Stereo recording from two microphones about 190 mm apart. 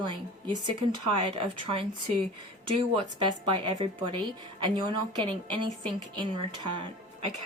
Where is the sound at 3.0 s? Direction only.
25° right (ahead or behind).